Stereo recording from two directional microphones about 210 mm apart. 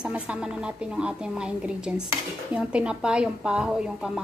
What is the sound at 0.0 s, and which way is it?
Speech, 5° right (ahead or behind).